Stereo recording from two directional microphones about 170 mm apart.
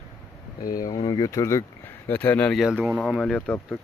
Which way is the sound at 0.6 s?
55° left (ahead or behind).